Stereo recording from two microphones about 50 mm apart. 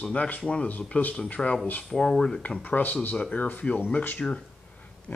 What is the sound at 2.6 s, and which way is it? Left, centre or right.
Speech, left.